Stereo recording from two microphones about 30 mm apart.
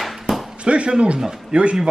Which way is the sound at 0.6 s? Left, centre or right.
Right.